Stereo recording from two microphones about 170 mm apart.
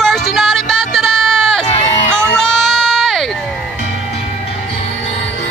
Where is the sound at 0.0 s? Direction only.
Centre (ahead or behind).